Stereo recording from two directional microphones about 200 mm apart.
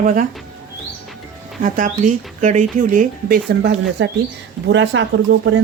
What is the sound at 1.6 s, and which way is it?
Speech, 40° right (ahead or behind).